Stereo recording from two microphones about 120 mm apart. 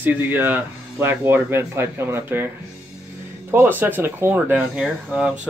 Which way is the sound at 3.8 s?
15° right (ahead or behind).